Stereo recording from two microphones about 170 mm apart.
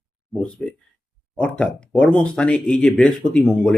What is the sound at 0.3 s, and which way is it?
Speech, 5° left (ahead or behind).